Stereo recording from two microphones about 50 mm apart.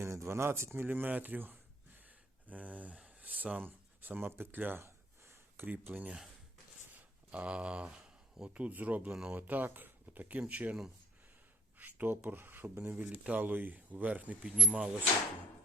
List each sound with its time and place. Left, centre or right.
0.0 s speech: right
5.3 s a sound: right
7.3 s speech: right
8.4 s speech: right
11.8 s speech: right
13.2 s speech: right
13.5 s speech: right
14.5 s speech: centre